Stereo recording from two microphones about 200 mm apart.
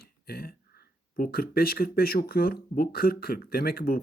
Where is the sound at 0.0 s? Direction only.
50° left (ahead or behind).